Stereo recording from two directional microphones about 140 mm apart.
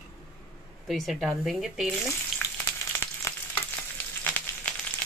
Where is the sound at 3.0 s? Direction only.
15° left (ahead or behind).